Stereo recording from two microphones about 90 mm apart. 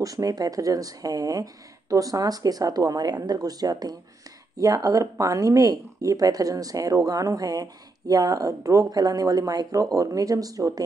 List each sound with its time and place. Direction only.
0.0 s speech: 40° right (ahead or behind)